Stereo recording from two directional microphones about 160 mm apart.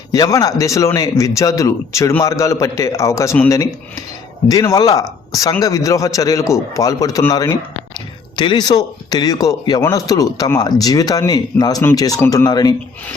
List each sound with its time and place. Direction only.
0.1 s speech: 20° left (ahead or behind)
4.4 s speech: 20° left (ahead or behind)